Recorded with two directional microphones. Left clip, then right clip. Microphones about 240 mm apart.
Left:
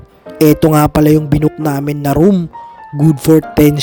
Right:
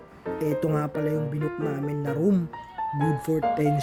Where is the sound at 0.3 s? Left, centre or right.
Left.